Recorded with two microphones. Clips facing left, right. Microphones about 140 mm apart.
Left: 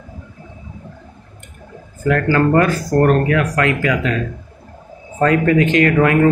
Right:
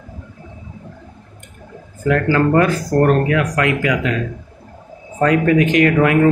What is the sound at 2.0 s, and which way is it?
Speech, 20° right (ahead or behind).